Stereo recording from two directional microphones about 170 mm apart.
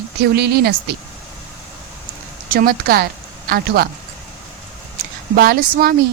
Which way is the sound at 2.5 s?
60° right (ahead or behind).